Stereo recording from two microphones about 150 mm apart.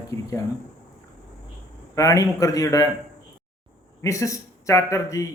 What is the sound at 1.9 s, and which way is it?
Speech, 20° left (ahead or behind).